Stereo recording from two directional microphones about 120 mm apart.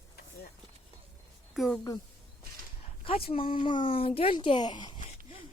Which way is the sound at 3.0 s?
45° left (ahead or behind).